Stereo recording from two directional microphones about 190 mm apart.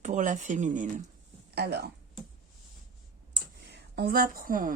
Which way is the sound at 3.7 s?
55° right (ahead or behind).